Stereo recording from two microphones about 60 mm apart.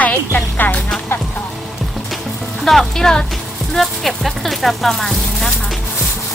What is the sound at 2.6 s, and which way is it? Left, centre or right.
Speech, centre.